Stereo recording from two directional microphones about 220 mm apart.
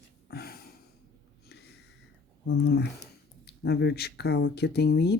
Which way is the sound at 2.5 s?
50° left (ahead or behind).